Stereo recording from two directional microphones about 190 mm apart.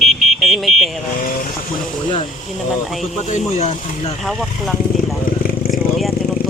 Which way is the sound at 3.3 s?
35° left (ahead or behind).